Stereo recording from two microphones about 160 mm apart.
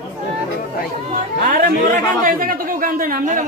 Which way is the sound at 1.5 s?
60° right (ahead or behind).